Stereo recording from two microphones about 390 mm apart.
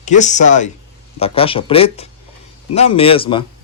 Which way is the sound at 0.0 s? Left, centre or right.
Centre.